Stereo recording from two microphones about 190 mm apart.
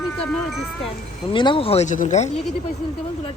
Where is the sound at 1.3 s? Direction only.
25° left (ahead or behind).